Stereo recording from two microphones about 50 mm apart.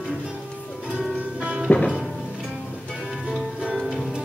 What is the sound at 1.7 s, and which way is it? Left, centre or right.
Music, left.